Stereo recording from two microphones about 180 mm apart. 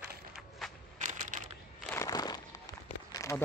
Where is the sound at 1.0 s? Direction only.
45° right (ahead or behind).